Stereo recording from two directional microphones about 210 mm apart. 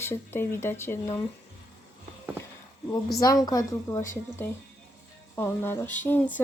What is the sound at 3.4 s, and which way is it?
Speech, 15° left (ahead or behind).